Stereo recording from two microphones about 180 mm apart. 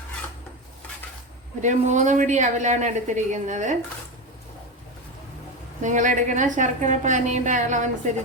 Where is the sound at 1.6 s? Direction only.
40° right (ahead or behind).